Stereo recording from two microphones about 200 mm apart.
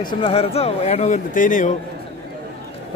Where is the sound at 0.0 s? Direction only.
25° left (ahead or behind); by 1.7 s 40° left (ahead or behind).